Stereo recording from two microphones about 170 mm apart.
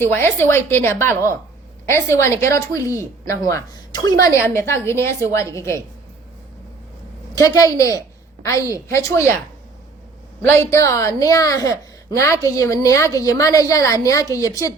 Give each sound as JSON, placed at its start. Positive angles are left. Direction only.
{"t": 0.0, "sound": "a woman's voice", "side_deg": 15}
{"t": 7.3, "sound": "a woman's voice", "side_deg": 20}
{"t": 10.4, "sound": "a woman's voice", "side_deg": 15}